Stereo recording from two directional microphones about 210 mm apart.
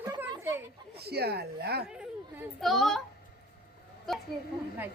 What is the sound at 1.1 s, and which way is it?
Speech, 50° right (ahead or behind).